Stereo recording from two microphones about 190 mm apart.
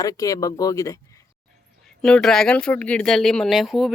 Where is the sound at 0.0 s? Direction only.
15° left (ahead or behind).